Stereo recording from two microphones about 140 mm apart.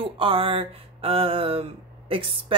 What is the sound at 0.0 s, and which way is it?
Speech, 40° right (ahead or behind).